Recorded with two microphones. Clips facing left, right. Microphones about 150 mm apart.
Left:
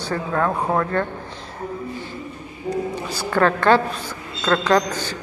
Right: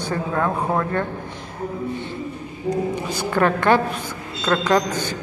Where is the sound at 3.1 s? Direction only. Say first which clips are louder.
Left 1 dB; 20° right (ahead or behind).